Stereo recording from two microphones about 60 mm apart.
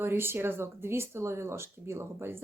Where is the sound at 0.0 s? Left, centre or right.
Right.